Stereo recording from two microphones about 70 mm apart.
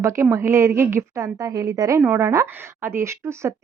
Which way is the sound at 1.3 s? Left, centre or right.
Right.